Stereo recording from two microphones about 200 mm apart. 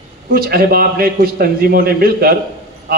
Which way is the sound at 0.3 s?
50° right (ahead or behind).